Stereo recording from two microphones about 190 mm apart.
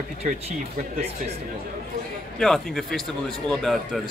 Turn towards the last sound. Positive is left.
turn(degrees=0)  # may be behind; listen again after turning